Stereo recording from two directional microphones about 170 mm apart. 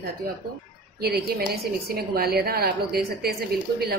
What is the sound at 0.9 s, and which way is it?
A woman's voice, 65° right (ahead or behind).